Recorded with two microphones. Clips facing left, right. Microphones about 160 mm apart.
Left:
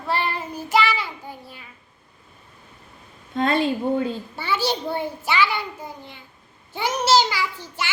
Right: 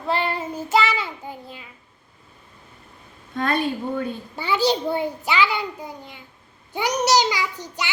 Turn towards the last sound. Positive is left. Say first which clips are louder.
# even
turn(degrees=-15)  # may be behind; listen again after turning